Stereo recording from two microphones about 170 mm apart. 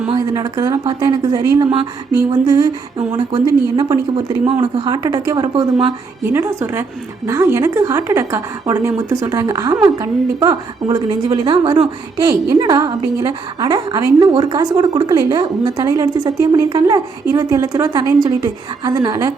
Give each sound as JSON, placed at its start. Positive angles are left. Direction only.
{"t": 0.1, "sound": "a woman's voice", "side_deg": -20}